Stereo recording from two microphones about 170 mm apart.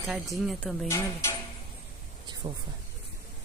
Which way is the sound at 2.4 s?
45° right (ahead or behind).